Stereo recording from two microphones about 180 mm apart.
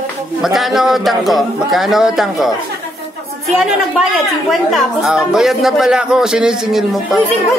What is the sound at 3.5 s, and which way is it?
Speech, centre (ahead or behind).